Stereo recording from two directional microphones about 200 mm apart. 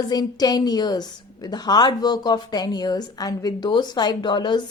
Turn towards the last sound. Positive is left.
turn(degrees=25)  # may be behind; listen again after turning